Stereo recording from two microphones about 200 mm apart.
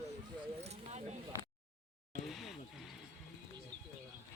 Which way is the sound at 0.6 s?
35° right (ahead or behind).